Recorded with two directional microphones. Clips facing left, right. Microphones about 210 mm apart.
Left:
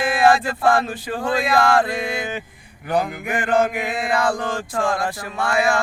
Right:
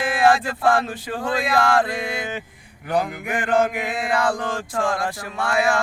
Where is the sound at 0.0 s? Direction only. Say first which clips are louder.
Left 2 dB; 25° left (ahead or behind).